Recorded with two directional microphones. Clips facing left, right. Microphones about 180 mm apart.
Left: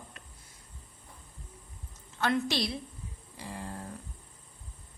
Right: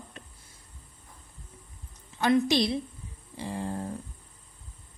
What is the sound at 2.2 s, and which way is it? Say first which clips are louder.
A woman's voice: right 6 dB; 15° right (ahead or behind).